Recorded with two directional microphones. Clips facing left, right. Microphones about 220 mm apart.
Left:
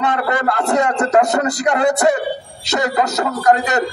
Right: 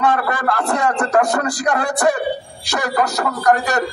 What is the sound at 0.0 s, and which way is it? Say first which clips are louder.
A man's voice: even; 20° left (ahead or behind).